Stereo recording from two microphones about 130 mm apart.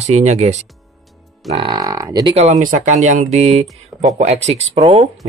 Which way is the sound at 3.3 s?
55° right (ahead or behind).